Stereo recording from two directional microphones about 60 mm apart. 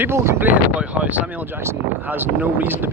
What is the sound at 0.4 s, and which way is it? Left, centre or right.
Speech, right.